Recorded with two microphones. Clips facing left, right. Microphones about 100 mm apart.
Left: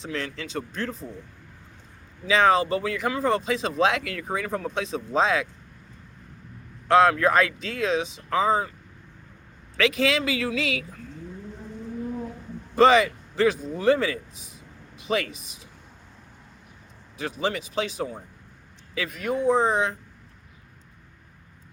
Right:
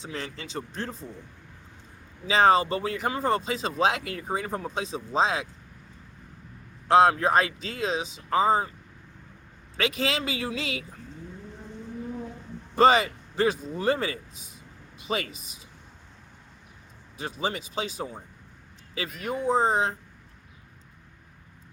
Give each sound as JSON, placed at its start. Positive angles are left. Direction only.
{"t": 0.1, "sound": "speech", "side_deg": -35}
{"t": 2.2, "sound": "speech", "side_deg": -35}
{"t": 6.9, "sound": "speech", "side_deg": -30}
{"t": 9.7, "sound": "speech", "side_deg": -35}
{"t": 11.6, "sound": "vehicle", "side_deg": 10}
{"t": 12.7, "sound": "speech", "side_deg": -35}
{"t": 17.4, "sound": "speech", "side_deg": -35}
{"t": 19.5, "sound": "speech", "side_deg": -35}